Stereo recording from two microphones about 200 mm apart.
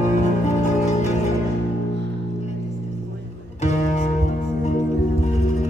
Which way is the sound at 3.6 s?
35° left (ahead or behind).